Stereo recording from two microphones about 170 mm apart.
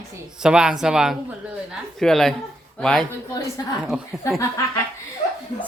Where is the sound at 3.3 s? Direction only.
20° left (ahead or behind).